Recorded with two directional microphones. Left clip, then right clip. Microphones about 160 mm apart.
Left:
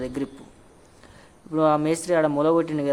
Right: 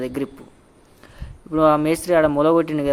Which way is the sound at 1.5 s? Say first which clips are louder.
Right 4 dB; 15° right (ahead or behind).